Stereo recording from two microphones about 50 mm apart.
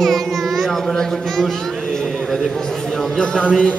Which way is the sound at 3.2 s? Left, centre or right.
Left.